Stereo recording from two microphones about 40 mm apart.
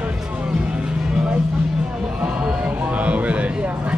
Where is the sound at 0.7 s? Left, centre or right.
Right.